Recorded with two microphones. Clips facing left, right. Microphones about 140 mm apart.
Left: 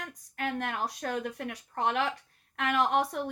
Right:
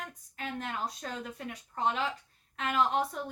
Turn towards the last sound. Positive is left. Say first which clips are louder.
# left 2 dB
turn(degrees=60)  # may be behind; listen again after turning